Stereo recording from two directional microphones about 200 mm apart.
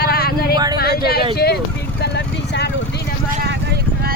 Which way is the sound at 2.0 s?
60° left (ahead or behind).